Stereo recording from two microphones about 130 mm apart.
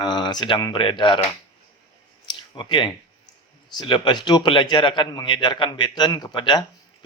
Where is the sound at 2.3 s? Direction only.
35° left (ahead or behind).